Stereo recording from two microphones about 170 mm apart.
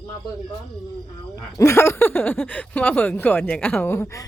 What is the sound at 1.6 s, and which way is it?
Speech, 15° left (ahead or behind).